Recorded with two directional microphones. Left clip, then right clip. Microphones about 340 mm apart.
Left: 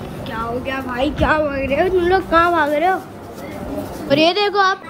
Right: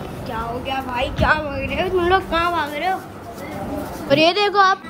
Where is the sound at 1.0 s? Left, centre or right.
Centre.